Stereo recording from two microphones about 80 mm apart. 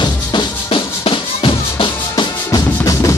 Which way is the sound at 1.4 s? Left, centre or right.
Left.